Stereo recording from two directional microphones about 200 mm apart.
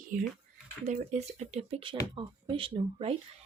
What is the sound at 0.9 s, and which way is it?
Speech, 35° right (ahead or behind).